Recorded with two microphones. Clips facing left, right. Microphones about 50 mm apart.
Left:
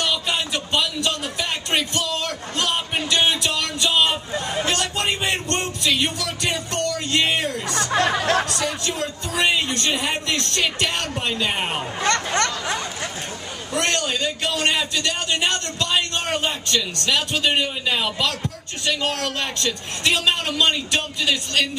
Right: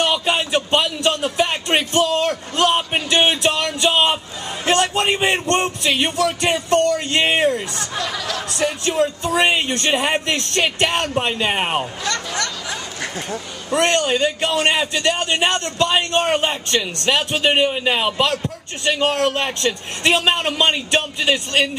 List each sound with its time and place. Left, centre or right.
0.0 s music: right
7.7 s a sound: left
8.1 s music: left
8.5 s a man's voice: right
12.0 s speech: left
13.7 s a man's voice: right